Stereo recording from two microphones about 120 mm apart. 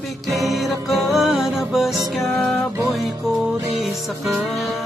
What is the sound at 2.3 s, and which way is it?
Music, 15° left (ahead or behind).